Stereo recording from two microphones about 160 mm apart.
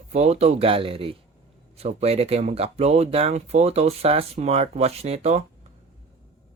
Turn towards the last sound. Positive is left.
turn(degrees=-40)  # may be behind; listen again after turning